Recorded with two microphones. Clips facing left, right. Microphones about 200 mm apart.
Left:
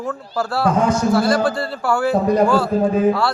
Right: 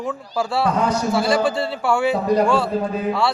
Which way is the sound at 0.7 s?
50° left (ahead or behind).